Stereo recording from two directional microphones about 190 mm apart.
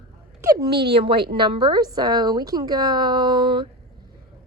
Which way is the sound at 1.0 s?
25° right (ahead or behind).